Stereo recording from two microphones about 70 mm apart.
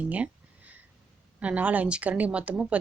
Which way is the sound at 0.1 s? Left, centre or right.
Right.